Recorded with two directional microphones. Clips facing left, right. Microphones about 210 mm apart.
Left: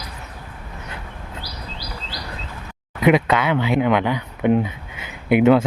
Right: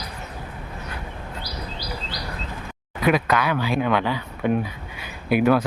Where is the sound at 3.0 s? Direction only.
20° left (ahead or behind).